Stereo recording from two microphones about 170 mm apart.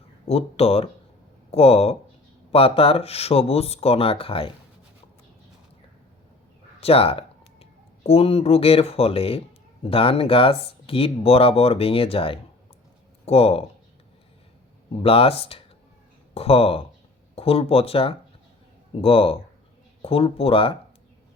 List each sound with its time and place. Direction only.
0.3 s speech: 35° left (ahead or behind)
6.7 s speech: 35° left (ahead or behind)
15.0 s speech: 35° left (ahead or behind)